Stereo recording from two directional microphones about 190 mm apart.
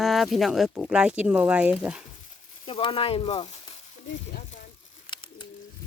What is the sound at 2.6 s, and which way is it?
Frying, 30° left (ahead or behind).